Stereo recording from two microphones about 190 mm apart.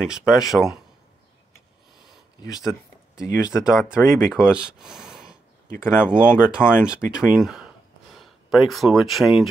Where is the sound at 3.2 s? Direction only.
5° right (ahead or behind).